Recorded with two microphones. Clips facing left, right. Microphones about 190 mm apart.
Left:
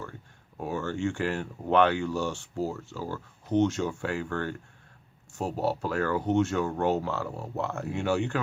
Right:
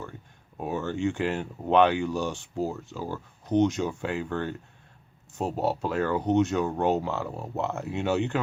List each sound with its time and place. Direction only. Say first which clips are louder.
0.5 s speech: right 1 dB; 20° right (ahead or behind)